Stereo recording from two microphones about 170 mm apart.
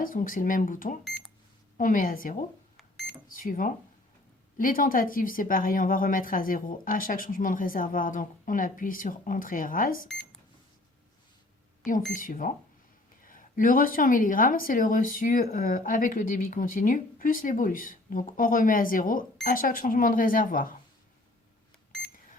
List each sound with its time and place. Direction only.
0.0 s speech: 55° left (ahead or behind)
1.0 s cash register: centre (ahead or behind)
1.8 s a woman's voice: 55° left (ahead or behind)
2.7 s a sound: centre (ahead or behind)
3.2 s speech: 55° left (ahead or behind)
12.1 s speech: 50° left (ahead or behind)